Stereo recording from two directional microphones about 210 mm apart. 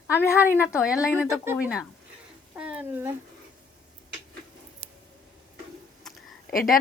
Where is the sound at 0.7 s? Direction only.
5° right (ahead or behind).